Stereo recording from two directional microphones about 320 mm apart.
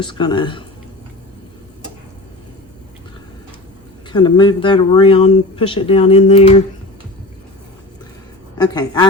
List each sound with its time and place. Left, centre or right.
0.0 s speech: centre
4.1 s speech: centre
8.5 s speech: centre